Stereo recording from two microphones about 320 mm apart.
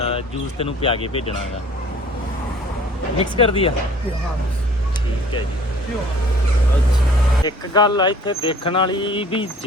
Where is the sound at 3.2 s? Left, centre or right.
Centre.